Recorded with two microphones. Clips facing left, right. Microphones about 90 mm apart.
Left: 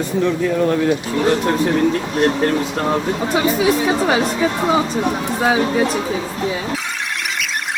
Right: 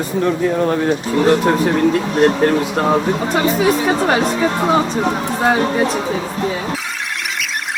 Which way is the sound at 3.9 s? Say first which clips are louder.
Right 1 dB; centre (ahead or behind).